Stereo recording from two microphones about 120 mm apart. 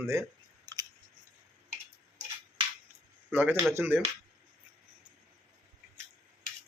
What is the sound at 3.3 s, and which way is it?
Speech, 15° right (ahead or behind).